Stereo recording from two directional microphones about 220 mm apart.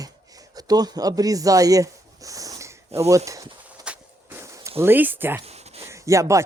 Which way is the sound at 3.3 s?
15° right (ahead or behind).